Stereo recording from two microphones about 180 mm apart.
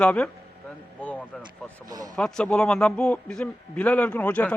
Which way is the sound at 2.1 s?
5° left (ahead or behind).